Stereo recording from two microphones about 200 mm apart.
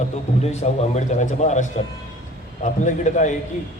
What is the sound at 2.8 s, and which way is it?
Speech, 40° left (ahead or behind).